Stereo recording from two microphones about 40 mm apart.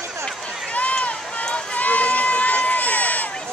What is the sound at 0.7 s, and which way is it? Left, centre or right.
Run, left.